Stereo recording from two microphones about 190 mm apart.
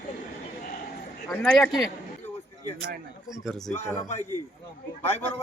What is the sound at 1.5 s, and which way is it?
Speech, centre (ahead or behind).